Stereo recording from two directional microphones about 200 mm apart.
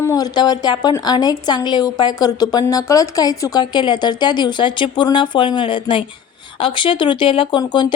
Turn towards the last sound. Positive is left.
turn(degrees=20)  # may be behind; listen again after turning